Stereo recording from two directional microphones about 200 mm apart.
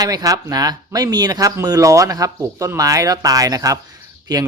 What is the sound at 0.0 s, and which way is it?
Speech, 20° right (ahead or behind).